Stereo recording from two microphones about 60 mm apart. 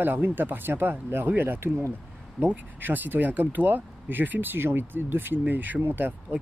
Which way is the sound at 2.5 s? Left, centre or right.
Right.